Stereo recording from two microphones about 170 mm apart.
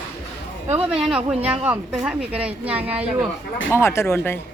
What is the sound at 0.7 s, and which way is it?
Speech, 5° right (ahead or behind).